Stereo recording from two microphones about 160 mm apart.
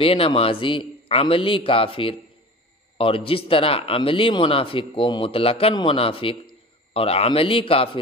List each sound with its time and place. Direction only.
0.0 s speech: 35° left (ahead or behind)